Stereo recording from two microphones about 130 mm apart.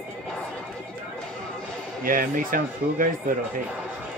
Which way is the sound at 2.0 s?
90° right.